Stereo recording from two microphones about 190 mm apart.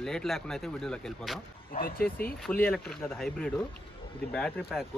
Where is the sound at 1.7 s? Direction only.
50° left (ahead or behind).